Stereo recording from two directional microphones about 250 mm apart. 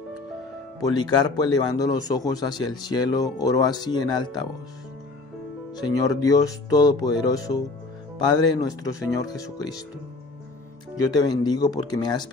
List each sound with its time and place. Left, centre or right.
0.7 s speech: centre
5.8 s speech: centre
11.1 s speech: centre